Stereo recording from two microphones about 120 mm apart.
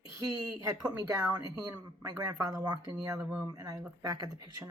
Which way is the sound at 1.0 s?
30° right (ahead or behind).